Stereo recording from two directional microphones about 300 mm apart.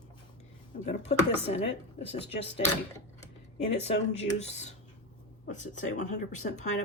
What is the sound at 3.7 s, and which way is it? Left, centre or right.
Speech, left.